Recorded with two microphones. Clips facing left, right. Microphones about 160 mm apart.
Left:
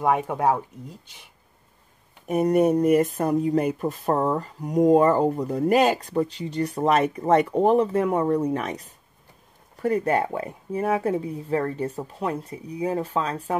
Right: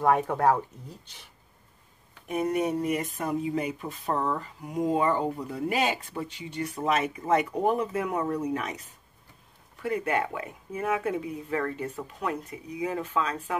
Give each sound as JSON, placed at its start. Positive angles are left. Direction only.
{"t": 0.0, "sound": "speech", "side_deg": 15}
{"t": 2.2, "sound": "speech", "side_deg": 45}